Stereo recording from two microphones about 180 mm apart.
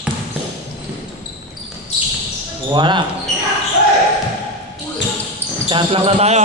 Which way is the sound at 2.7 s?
25° right (ahead or behind).